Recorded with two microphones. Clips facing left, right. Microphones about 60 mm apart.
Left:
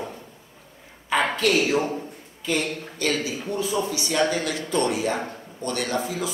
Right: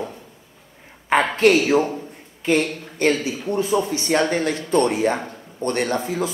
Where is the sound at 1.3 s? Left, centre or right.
Right.